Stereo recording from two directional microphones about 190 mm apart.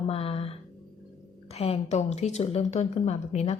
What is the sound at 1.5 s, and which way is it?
A woman's voice, 30° left (ahead or behind).